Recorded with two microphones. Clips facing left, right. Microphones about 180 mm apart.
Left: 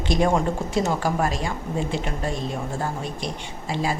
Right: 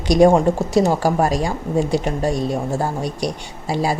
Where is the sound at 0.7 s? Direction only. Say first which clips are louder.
Right 6 dB; 35° right (ahead or behind).